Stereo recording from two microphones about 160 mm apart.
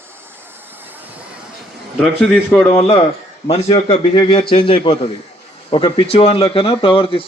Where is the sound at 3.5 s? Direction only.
40° left (ahead or behind).